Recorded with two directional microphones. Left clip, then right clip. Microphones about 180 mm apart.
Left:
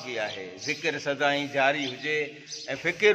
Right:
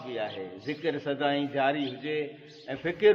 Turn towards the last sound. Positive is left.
turn(degrees=5)  # may be behind; listen again after turning